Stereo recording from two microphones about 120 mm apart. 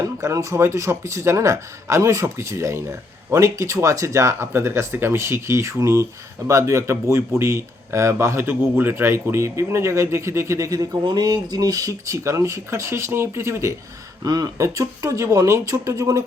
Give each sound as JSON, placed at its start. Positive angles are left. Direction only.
{"t": 0.0, "sound": "speech", "side_deg": -30}